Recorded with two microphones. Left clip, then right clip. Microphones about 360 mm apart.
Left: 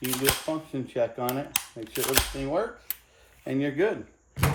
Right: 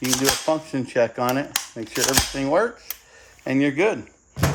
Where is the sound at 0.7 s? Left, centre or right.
Right.